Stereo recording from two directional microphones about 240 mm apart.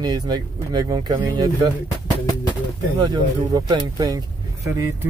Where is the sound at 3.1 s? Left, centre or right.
Centre.